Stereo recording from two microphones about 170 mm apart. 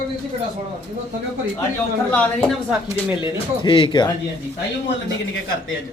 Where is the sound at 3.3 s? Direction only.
30° left (ahead or behind).